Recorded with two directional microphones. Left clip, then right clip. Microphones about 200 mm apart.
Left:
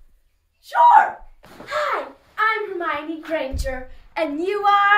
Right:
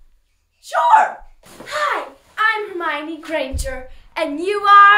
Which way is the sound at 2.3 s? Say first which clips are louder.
Right 2 dB; 25° right (ahead or behind).